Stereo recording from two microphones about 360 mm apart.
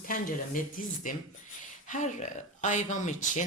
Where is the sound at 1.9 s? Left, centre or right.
Left.